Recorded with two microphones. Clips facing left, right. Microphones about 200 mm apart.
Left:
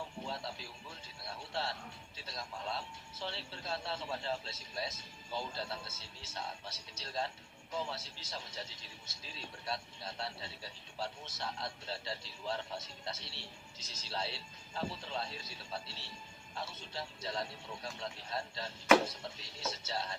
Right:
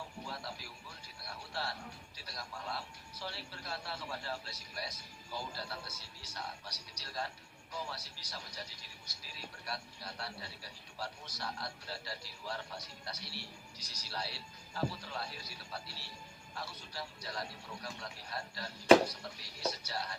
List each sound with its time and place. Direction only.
0.3 s music: 25° left (ahead or behind)
2.1 s speech: 25° left (ahead or behind)